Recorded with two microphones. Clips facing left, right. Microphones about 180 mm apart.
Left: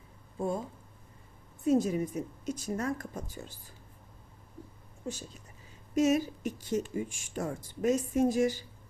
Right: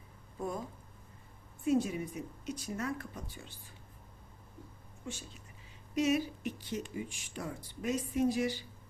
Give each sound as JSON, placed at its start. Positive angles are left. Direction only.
{"t": 0.3, "sound": "speech", "side_deg": 25}
{"t": 1.6, "sound": "a woman's voice", "side_deg": 40}
{"t": 5.0, "sound": "a woman's voice", "side_deg": 40}